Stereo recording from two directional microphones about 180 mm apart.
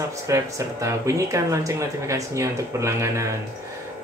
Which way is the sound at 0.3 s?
15° right (ahead or behind).